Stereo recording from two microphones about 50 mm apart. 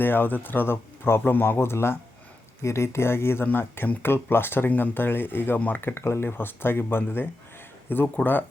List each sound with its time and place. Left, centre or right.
0.0 s speech: left
2.6 s speech: left
3.4 s speech: left
5.5 s speech: left
5.8 s speech: left
6.2 s speech: left